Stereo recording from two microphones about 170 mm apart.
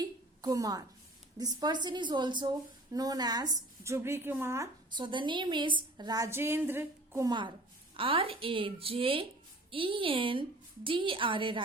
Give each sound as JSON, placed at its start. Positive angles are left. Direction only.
{"t": 0.0, "sound": "a sound", "side_deg": -20}
{"t": 1.4, "sound": "a woman's voice", "side_deg": -25}
{"t": 7.3, "sound": "a woman's voice", "side_deg": -25}